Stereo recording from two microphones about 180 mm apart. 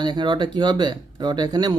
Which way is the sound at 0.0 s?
25° right (ahead or behind).